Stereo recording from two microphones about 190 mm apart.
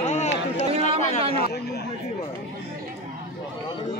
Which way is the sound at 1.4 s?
55° left (ahead or behind).